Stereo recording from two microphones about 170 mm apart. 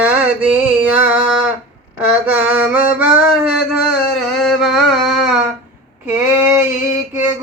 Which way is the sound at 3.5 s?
Centre (ahead or behind).